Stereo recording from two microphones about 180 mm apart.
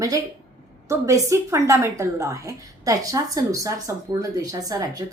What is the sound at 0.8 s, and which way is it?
A woman's voice, 15° right (ahead or behind).